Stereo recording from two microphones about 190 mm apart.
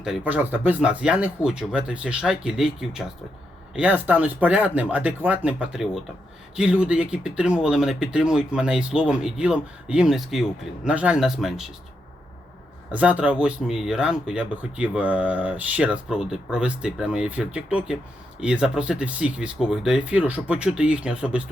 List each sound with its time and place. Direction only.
0.0 s speech: 5° right (ahead or behind)
12.9 s speech: 5° right (ahead or behind)